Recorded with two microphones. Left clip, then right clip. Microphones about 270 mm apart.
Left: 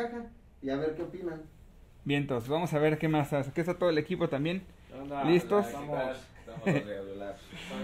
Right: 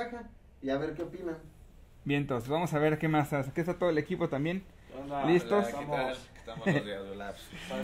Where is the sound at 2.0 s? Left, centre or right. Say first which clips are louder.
Left 1 dB; centre.